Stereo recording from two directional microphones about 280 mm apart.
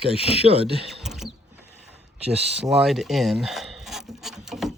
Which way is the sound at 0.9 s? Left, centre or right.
Centre.